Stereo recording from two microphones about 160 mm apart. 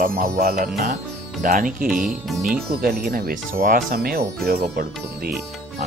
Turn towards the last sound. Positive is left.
turn(degrees=-65)  # may be behind; listen again after turning